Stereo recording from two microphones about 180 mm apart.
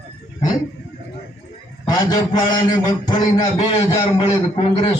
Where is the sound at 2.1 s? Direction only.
20° left (ahead or behind).